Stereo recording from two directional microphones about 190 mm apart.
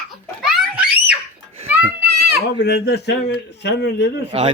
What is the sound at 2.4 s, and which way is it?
A man's voice, 65° left (ahead or behind).